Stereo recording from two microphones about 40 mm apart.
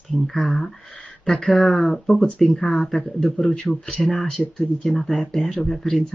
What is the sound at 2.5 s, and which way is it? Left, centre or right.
Speech, centre.